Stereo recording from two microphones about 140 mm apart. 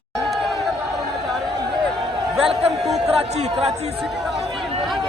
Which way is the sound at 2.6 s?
45° right (ahead or behind).